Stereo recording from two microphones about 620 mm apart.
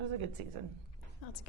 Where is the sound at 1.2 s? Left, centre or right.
Left.